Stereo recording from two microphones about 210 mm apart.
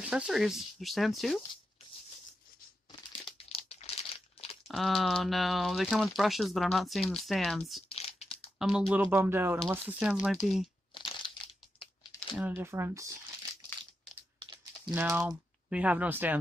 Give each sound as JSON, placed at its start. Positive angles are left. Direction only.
{"t": 0.0, "sound": "speech", "side_deg": -5}
{"t": 3.1, "sound": "crumpling", "side_deg": 25}
{"t": 4.6, "sound": "speech", "side_deg": 0}
{"t": 7.9, "sound": "a sound", "side_deg": 30}
{"t": 8.5, "sound": "speech", "side_deg": 0}
{"t": 11.0, "sound": "crumpling", "side_deg": 25}
{"t": 12.2, "sound": "speech", "side_deg": -5}
{"t": 14.9, "sound": "speech", "side_deg": -10}